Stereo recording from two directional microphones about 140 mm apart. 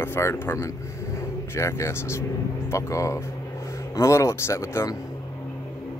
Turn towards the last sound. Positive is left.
turn(degrees=20)  # may be behind; listen again after turning